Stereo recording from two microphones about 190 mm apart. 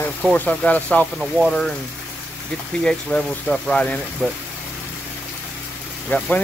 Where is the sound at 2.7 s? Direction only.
5° left (ahead or behind).